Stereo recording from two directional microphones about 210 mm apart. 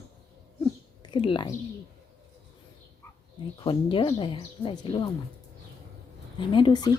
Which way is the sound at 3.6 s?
25° left (ahead or behind).